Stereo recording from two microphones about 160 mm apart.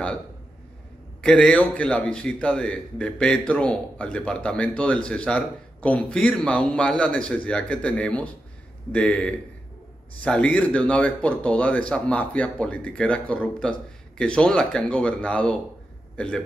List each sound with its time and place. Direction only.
1.2 s a man's voice: 5° left (ahead or behind)